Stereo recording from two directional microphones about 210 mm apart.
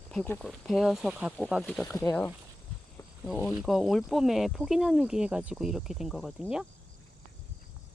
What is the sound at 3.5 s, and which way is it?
Speech, centre (ahead or behind).